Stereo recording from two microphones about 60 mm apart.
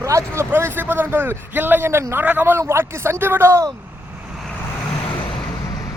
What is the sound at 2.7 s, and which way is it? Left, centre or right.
Speech, right.